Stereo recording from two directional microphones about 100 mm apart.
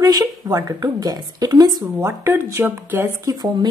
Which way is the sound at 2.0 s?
30° right (ahead or behind).